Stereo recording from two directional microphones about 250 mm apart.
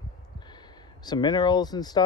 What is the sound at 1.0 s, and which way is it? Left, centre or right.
Speech, centre.